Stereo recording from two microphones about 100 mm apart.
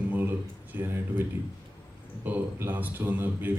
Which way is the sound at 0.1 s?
20° right (ahead or behind).